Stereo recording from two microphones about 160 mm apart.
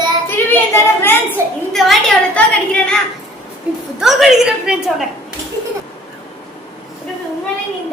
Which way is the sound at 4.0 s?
Centre (ahead or behind).